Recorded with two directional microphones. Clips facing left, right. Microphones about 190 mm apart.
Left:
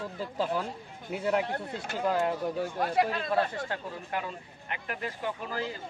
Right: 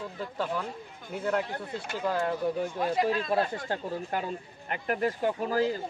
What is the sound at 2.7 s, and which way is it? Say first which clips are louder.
Speech: left 1 dB; 65° left (ahead or behind).